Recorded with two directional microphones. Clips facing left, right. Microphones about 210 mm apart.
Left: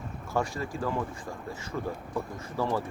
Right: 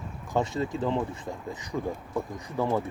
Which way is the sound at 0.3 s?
20° right (ahead or behind).